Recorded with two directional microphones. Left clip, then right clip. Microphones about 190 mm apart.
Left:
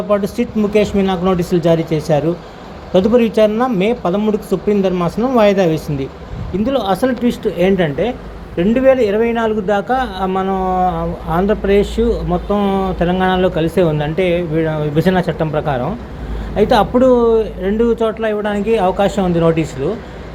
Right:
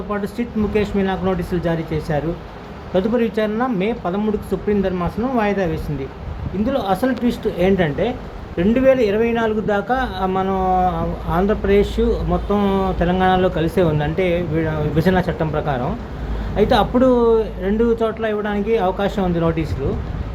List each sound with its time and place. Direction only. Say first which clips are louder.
0.1 s a man's voice: left 8 dB; 15° left (ahead or behind)